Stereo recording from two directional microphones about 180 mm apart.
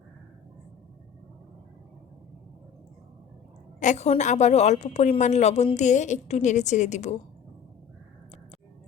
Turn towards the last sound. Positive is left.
turn(degrees=40)  # may be behind; listen again after turning